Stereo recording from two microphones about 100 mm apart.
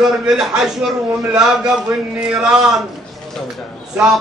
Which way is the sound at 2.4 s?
5° right (ahead or behind).